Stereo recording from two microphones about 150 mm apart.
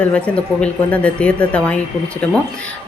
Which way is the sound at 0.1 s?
10° left (ahead or behind).